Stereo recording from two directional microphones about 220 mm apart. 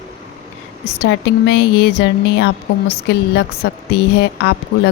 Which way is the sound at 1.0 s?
50° left (ahead or behind).